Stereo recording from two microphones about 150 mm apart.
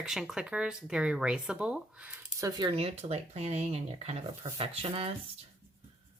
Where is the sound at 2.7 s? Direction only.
40° right (ahead or behind).